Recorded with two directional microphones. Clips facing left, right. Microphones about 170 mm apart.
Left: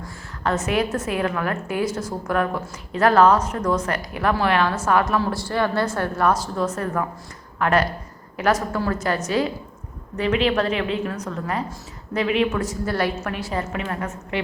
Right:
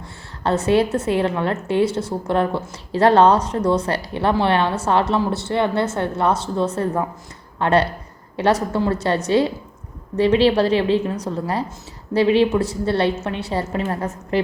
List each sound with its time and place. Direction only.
0.0 s a woman's voice: 30° right (ahead or behind)